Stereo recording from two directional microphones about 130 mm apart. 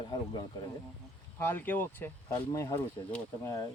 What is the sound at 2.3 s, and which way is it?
Speech, 25° left (ahead or behind).